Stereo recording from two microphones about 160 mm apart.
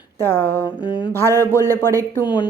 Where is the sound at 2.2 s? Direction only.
30° left (ahead or behind).